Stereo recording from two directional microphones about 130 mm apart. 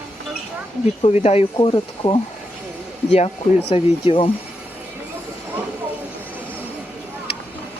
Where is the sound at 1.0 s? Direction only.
55° left (ahead or behind).